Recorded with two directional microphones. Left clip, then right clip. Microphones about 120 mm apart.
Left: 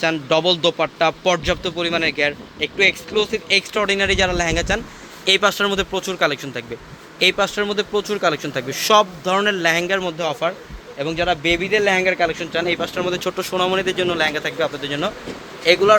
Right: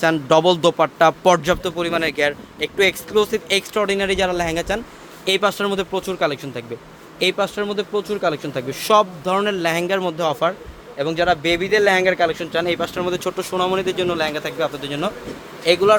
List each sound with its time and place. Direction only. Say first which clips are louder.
0.0 s speech: right 3 dB; 40° right (ahead or behind)
1.2 s speech: right 3 dB; 50° right (ahead or behind)
1.6 s speech: left 1 dB; 30° right (ahead or behind)
2.7 s speech: even; 50° right (ahead or behind)
3.8 s speech: right 1 dB; 20° right (ahead or behind)
10.0 s speech: right 2 dB; 40° right (ahead or behind); by 13.3 s 20° right (ahead or behind)
13.3 s speech: left 2 dB; centre (ahead or behind)